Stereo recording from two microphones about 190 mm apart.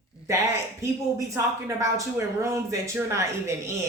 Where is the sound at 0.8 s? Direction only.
15° right (ahead or behind).